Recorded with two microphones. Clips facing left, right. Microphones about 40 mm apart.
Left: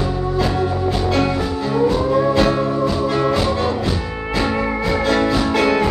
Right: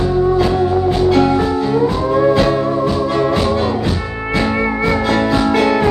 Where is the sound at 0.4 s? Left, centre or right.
Centre.